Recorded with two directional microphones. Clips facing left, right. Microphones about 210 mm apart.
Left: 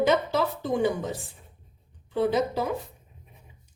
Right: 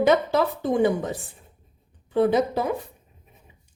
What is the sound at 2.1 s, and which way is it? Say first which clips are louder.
Speech: right 4 dB; 55° right (ahead or behind).